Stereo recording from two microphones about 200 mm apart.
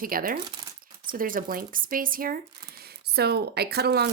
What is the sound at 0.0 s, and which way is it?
Speech, 45° right (ahead or behind).